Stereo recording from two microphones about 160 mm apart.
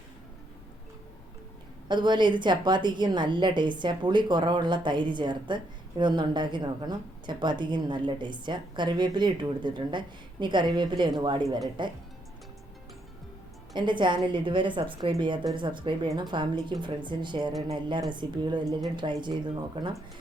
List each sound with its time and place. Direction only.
1.9 s a woman's voice: 30° right (ahead or behind)
13.7 s a woman's voice: 30° right (ahead or behind)